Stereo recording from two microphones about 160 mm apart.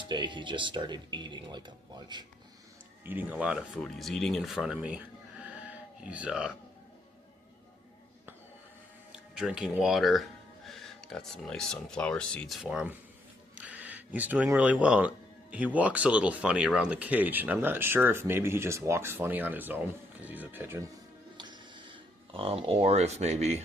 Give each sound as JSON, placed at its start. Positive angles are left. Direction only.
{"t": 0.0, "sound": "speech", "side_deg": -30}
{"t": 3.0, "sound": "speech", "side_deg": -10}
{"t": 9.1, "sound": "speech", "side_deg": -5}
{"t": 21.3, "sound": "a sound", "side_deg": -25}